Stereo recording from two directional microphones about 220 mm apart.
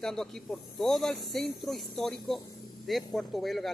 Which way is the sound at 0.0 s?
Centre (ahead or behind).